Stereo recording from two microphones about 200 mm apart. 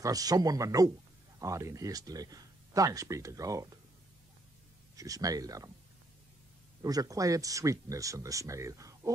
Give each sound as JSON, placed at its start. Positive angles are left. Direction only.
{"t": 0.0, "sound": "speech", "side_deg": -20}
{"t": 4.9, "sound": "speech", "side_deg": -15}
{"t": 6.8, "sound": "speech", "side_deg": -15}